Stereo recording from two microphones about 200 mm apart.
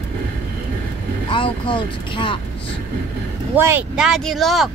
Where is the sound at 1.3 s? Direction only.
25° left (ahead or behind).